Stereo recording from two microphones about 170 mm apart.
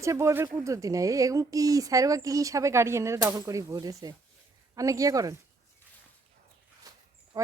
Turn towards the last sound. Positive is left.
turn(degrees=-20)  # may be behind; listen again after turning